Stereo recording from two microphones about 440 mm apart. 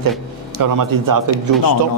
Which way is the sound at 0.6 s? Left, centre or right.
Right.